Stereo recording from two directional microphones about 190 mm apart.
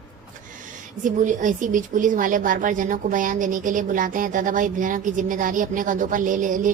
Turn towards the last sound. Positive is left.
turn(degrees=-45)  # may be behind; listen again after turning